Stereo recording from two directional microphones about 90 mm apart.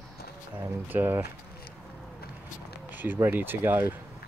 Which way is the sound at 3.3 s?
25° right (ahead or behind).